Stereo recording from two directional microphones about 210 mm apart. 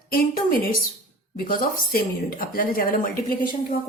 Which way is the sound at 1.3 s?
45° left (ahead or behind).